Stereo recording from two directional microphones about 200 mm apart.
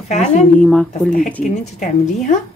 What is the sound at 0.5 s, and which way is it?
Speech, 5° left (ahead or behind).